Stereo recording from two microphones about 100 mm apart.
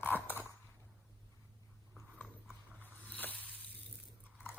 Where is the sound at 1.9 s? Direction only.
5° right (ahead or behind).